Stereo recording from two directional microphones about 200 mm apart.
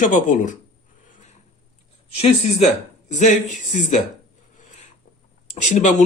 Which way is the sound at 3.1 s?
35° left (ahead or behind).